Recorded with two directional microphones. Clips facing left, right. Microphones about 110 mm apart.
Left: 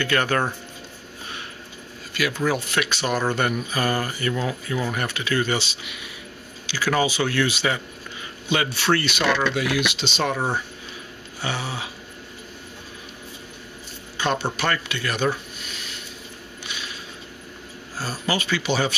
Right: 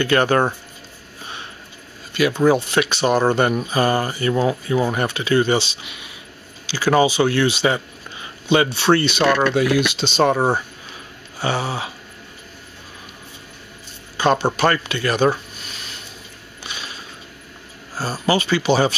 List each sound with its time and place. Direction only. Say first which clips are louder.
0.0 s speech: right 6 dB; 30° right (ahead or behind)
2.1 s speech: right 7 dB; 25° right (ahead or behind)
14.1 s speech: right 7 dB; 40° right (ahead or behind)
16.6 s a sound: right 3 dB; 35° right (ahead or behind)
17.9 s speech: right 6 dB; 35° right (ahead or behind)